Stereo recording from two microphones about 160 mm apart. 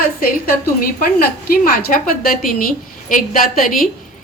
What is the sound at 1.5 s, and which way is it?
A woman's voice, 60° left (ahead or behind).